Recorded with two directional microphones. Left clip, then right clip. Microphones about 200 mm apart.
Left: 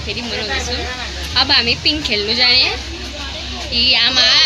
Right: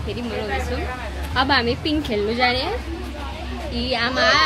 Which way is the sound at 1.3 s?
20° right (ahead or behind).